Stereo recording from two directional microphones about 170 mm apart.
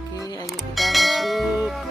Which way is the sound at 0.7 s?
Centre (ahead or behind).